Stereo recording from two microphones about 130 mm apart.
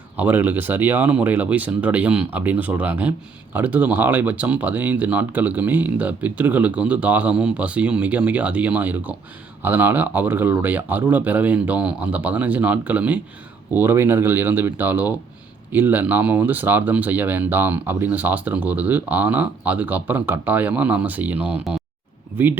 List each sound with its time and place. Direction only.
0.2 s speech: 15° right (ahead or behind)